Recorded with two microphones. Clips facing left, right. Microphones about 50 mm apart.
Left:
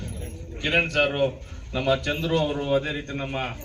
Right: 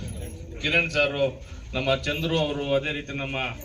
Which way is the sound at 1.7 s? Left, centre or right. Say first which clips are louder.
Left 1 dB; left.